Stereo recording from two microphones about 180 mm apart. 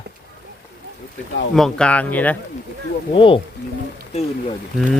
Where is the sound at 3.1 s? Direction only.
30° left (ahead or behind).